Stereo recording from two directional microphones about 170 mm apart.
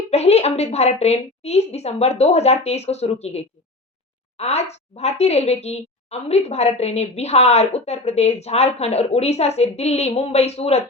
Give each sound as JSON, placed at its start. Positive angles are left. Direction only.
{"t": 0.1, "sound": "a woman's voice", "side_deg": 40}